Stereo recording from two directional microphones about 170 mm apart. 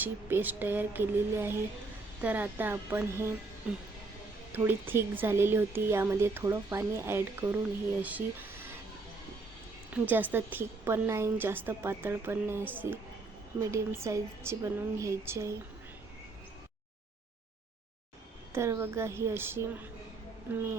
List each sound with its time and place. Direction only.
0.0 s speech: 10° right (ahead or behind)
4.5 s speech: 10° right (ahead or behind)
9.9 s speech: 10° right (ahead or behind)
18.5 s speech: 15° right (ahead or behind)